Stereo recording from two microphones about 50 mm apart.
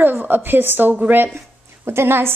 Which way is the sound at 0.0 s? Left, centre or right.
Right.